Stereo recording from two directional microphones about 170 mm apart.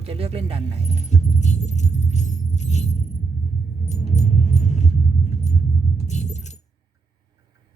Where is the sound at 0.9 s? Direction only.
45° left (ahead or behind).